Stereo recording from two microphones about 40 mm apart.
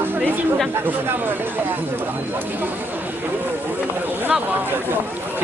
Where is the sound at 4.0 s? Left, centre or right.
Right.